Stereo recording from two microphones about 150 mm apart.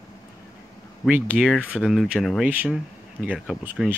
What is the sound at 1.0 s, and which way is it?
Speech, 5° right (ahead or behind).